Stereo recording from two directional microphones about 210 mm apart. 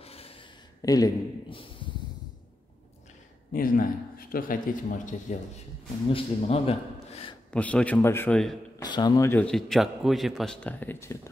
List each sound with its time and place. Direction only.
0.0 s a sound: 30° left (ahead or behind)
0.8 s a man's voice: 15° left (ahead or behind)
3.5 s a man's voice: 40° left (ahead or behind)
7.5 s a man's voice: 5° left (ahead or behind)
8.8 s a man's voice: 20° left (ahead or behind)